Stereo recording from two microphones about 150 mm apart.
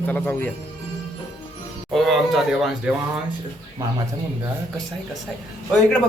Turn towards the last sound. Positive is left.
turn(degrees=5)  # may be behind; listen again after turning